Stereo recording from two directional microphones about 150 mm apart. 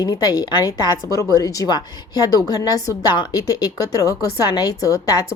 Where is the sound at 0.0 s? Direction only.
25° left (ahead or behind).